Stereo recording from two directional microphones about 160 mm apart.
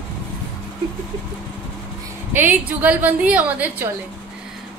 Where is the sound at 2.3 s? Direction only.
10° right (ahead or behind).